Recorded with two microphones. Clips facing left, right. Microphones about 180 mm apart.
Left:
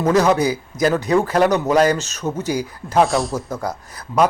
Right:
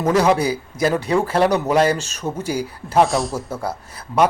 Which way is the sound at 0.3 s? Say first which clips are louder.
Left 2 dB; 30° right (ahead or behind).